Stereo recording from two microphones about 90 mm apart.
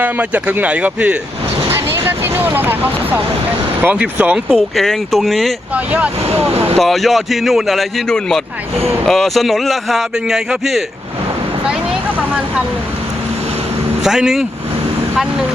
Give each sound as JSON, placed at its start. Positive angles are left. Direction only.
{"t": 0.0, "sound": "speech", "side_deg": -15}
{"t": 1.7, "sound": "speech", "side_deg": -25}
{"t": 4.8, "sound": "speech", "side_deg": 0}
{"t": 5.7, "sound": "speech", "side_deg": -15}
{"t": 6.7, "sound": "speech", "side_deg": 0}
{"t": 14.0, "sound": "speech", "side_deg": -5}